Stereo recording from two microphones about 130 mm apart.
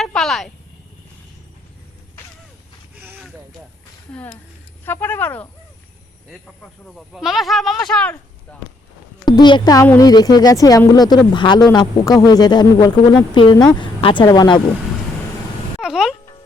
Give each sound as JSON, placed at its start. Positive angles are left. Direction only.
{"t": 0.0, "sound": "a sound", "side_deg": 0}
{"t": 2.9, "sound": "a sound", "side_deg": -10}
{"t": 4.9, "sound": "speech", "side_deg": 15}
{"t": 6.6, "sound": "speech", "side_deg": 0}
{"t": 9.2, "sound": "a man's voice", "side_deg": 35}
{"t": 15.8, "sound": "music", "side_deg": -5}